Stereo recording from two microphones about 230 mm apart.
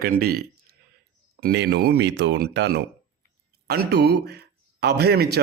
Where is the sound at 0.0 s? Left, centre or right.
Right.